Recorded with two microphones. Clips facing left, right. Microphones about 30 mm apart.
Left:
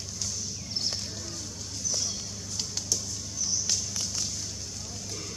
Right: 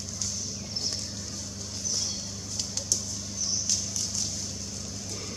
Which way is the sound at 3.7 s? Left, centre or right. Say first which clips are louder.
Even; centre.